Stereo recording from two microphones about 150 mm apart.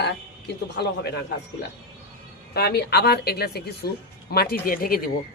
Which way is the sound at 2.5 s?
90° left.